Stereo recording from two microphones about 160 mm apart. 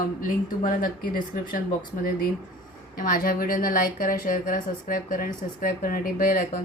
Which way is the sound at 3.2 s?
65° left (ahead or behind).